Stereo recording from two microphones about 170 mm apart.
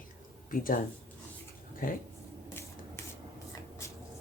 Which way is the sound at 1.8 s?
55° left (ahead or behind).